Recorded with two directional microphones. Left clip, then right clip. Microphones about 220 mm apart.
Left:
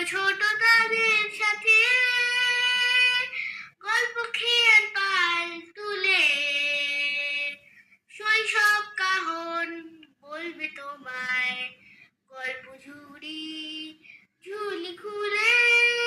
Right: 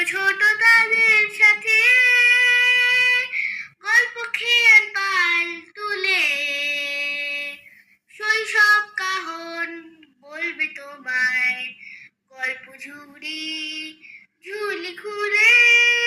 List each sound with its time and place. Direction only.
0.0 s child singing: 10° right (ahead or behind)
10.2 s female singing: 10° right (ahead or behind)
12.4 s male singing: 5° right (ahead or behind)
14.4 s child singing: 10° right (ahead or behind)